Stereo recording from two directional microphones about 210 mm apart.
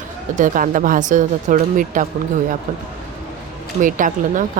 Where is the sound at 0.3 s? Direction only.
40° right (ahead or behind).